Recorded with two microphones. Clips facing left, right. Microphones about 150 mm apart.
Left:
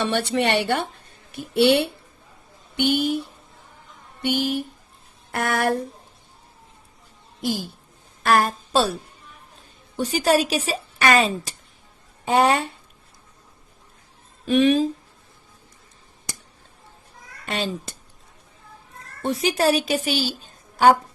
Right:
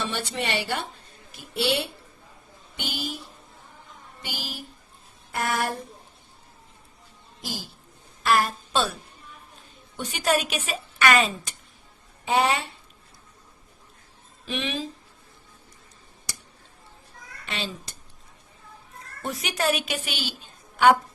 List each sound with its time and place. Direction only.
0.0 s a woman's voice: 65° left (ahead or behind)
8.2 s a woman's voice: 45° left (ahead or behind)
10.0 s a woman's voice: 35° left (ahead or behind)
12.2 s speech: 45° left (ahead or behind)
14.4 s speech: 45° left (ahead or behind)
17.4 s speech: 45° left (ahead or behind)
19.2 s a woman's voice: 30° left (ahead or behind)